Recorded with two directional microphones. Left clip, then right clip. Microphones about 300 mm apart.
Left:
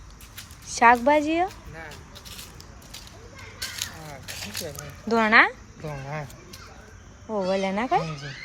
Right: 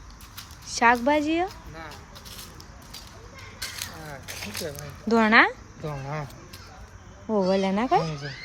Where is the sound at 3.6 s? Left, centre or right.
Right; by 5.5 s centre.